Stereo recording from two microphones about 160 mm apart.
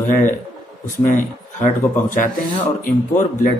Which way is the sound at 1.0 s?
55° left (ahead or behind).